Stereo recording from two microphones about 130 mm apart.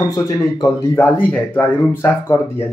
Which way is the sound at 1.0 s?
15° left (ahead or behind).